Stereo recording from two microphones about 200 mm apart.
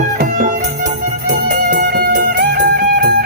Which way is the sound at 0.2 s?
45° right (ahead or behind).